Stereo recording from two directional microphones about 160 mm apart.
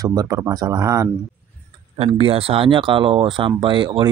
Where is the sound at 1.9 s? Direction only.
40° right (ahead or behind).